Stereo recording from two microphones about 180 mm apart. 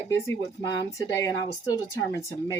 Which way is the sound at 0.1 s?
20° left (ahead or behind).